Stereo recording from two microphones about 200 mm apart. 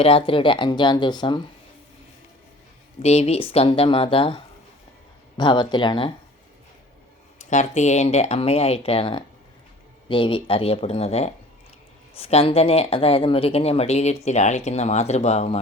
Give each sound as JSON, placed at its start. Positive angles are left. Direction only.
{"t": 0.0, "sound": "speech", "side_deg": 25}
{"t": 3.0, "sound": "speech", "side_deg": 30}
{"t": 5.4, "sound": "speech", "side_deg": 25}
{"t": 7.3, "sound": "speech", "side_deg": 35}